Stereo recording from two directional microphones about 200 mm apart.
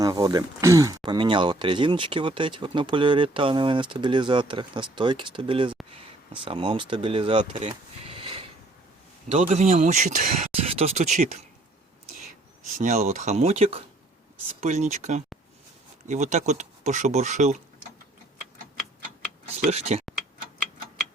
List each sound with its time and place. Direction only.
0.0 s speech: 20° right (ahead or behind)
7.5 s sniff: 30° right (ahead or behind)
9.3 s speech: 35° right (ahead or behind)
12.6 s speech: 35° right (ahead or behind)
19.5 s speech: 35° right (ahead or behind)